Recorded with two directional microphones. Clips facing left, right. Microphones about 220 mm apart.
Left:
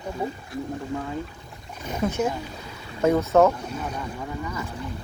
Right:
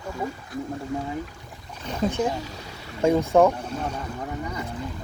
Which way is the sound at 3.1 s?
15° right (ahead or behind).